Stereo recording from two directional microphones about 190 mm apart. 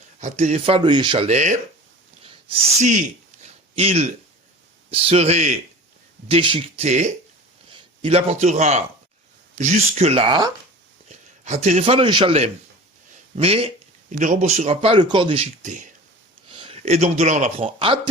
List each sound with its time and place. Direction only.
0.2 s speech: 40° right (ahead or behind)
3.4 s a sound: 35° right (ahead or behind)
4.9 s a man's voice: 30° right (ahead or behind)
11.4 s speech: 35° right (ahead or behind)
15.6 s speech: 40° right (ahead or behind)
16.5 s speech: 30° right (ahead or behind)